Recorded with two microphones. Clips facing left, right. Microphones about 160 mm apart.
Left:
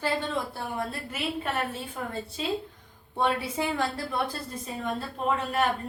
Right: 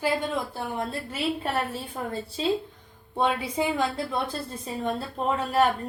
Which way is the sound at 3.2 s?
15° right (ahead or behind).